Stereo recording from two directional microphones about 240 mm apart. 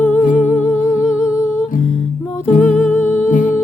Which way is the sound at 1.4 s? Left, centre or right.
Centre.